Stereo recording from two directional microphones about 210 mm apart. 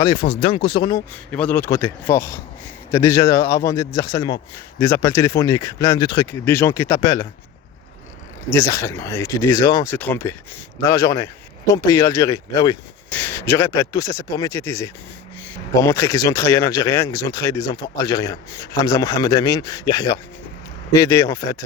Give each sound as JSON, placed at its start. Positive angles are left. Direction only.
{"t": 0.0, "sound": "speech", "side_deg": 20}
{"t": 1.3, "sound": "speech", "side_deg": 5}
{"t": 8.4, "sound": "speech", "side_deg": 15}